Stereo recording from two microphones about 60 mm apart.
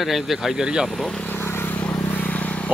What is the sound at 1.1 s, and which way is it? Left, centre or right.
Vehicle, left.